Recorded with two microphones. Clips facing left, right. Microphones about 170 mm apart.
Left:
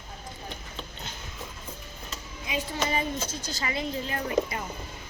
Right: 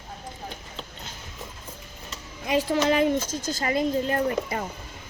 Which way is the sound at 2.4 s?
70° right (ahead or behind).